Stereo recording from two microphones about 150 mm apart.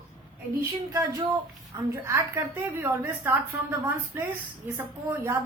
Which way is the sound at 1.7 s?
15° right (ahead or behind).